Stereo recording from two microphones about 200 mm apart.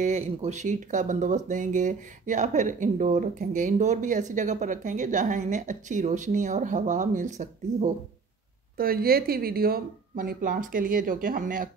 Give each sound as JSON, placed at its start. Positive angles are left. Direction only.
{"t": 0.0, "sound": "speech", "side_deg": -35}
{"t": 8.7, "sound": "speech", "side_deg": -50}